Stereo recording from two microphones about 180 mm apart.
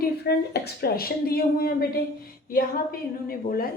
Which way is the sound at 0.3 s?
65° left (ahead or behind).